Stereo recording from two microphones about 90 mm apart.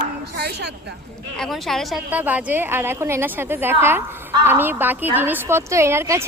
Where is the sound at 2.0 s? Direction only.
20° right (ahead or behind).